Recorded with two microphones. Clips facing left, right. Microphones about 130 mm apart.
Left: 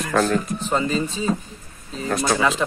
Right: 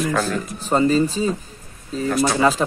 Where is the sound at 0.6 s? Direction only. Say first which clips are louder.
Right 5 dB; 35° right (ahead or behind).